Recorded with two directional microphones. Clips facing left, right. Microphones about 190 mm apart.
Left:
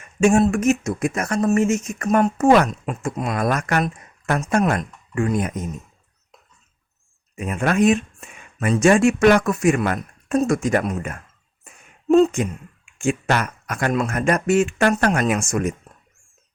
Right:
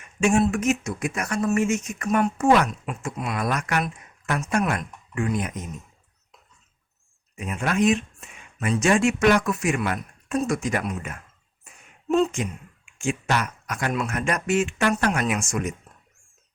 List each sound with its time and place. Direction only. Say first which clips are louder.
0.2 s speech: left 4 dB; 45° left (ahead or behind)
7.3 s speech: left 4 dB; 55° left (ahead or behind)